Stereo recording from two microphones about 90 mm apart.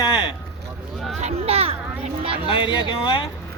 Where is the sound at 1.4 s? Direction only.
90° right.